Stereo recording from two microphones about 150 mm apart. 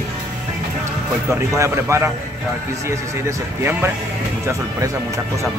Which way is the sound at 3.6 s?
15° right (ahead or behind).